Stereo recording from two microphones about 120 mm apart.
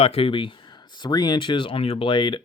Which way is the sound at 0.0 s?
55° left (ahead or behind).